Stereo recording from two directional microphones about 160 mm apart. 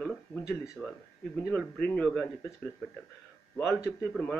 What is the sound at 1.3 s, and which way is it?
Speech, 5° left (ahead or behind).